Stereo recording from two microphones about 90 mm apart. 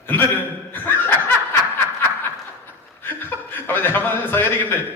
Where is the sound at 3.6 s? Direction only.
20° left (ahead or behind).